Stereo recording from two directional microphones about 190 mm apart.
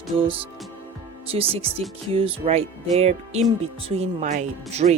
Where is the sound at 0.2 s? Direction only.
30° right (ahead or behind).